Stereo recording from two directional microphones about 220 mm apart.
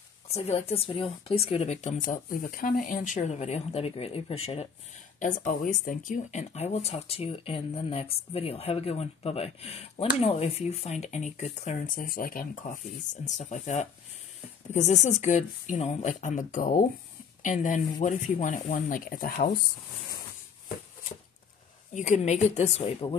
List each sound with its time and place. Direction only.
0.3 s speech: 30° left (ahead or behind)
21.9 s speech: 35° left (ahead or behind)